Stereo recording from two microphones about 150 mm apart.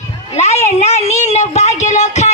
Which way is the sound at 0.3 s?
50° left (ahead or behind).